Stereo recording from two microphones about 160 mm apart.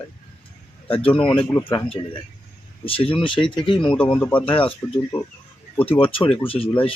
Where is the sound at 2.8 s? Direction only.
35° left (ahead or behind).